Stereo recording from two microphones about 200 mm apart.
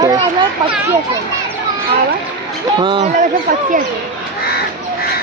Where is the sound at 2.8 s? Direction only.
25° right (ahead or behind).